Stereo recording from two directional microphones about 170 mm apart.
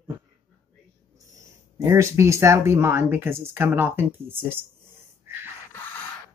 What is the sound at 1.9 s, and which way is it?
Speech, 15° right (ahead or behind).